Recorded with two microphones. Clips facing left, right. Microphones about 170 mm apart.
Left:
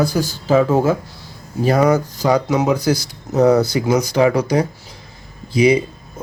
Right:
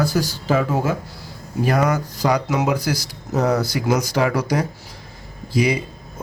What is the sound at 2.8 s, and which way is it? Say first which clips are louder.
Speech: left 6 dB; 20° left (ahead or behind).